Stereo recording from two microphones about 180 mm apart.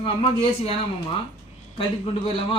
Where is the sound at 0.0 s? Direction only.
30° left (ahead or behind).